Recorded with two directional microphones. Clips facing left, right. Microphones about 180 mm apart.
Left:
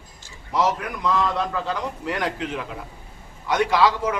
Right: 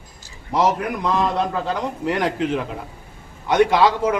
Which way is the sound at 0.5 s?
25° right (ahead or behind).